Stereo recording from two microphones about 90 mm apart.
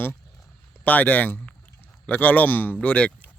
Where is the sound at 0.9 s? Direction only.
20° left (ahead or behind).